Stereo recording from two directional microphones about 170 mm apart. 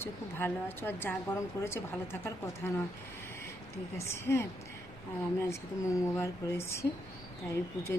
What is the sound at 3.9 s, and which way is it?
A woman's voice, 15° left (ahead or behind).